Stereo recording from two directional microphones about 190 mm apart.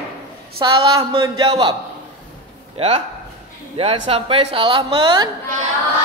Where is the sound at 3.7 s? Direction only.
30° right (ahead or behind).